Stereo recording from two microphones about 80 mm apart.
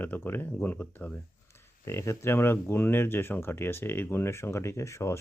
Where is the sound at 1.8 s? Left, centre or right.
Left.